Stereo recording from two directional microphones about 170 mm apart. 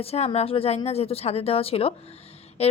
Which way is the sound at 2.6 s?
35° left (ahead or behind).